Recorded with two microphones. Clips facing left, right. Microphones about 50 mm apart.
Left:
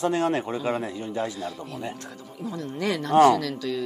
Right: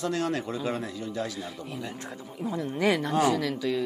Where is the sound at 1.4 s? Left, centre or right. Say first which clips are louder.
Left 3 dB; centre.